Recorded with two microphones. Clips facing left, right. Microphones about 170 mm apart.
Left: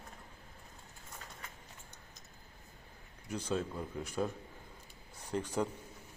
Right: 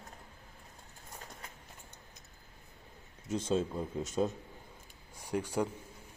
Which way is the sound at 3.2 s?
25° right (ahead or behind).